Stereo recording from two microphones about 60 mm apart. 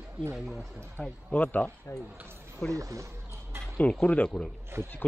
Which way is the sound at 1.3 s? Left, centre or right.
Left.